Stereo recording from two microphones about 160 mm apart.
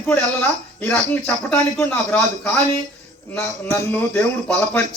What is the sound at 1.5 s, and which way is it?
A man's voice, 10° left (ahead or behind).